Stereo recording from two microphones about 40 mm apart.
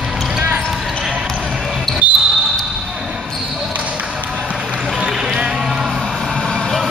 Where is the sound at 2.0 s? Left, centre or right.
Right.